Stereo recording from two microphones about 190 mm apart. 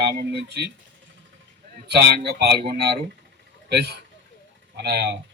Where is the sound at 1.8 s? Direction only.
60° right (ahead or behind).